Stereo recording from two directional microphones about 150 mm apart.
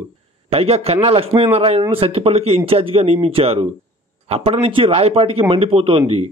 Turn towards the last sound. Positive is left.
turn(degrees=-40)  # may be behind; listen again after turning